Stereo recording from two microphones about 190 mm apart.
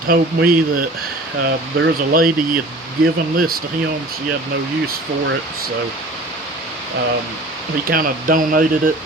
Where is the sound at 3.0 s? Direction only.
50° right (ahead or behind).